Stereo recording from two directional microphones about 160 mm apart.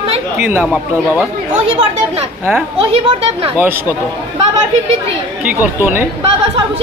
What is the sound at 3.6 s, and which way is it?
Speech, 10° right (ahead or behind).